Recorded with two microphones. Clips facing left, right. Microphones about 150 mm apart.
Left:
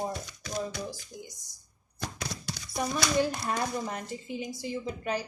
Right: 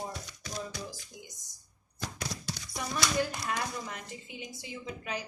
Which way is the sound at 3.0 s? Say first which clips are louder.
Left 3 dB; 40° left (ahead or behind).